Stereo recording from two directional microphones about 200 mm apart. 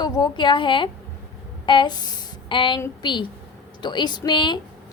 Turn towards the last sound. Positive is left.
turn(degrees=25)  # may be behind; listen again after turning